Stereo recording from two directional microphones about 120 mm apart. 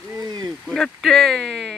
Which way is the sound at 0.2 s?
35° right (ahead or behind).